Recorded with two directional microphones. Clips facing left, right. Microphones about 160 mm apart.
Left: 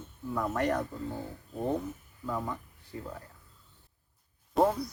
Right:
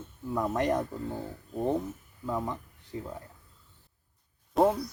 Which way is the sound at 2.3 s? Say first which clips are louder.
Right 2 dB; 20° right (ahead or behind).